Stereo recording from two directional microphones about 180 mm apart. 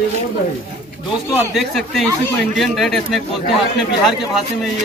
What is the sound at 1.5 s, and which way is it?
Speech, centre (ahead or behind).